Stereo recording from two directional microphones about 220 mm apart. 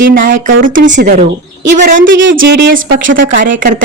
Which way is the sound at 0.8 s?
50° right (ahead or behind).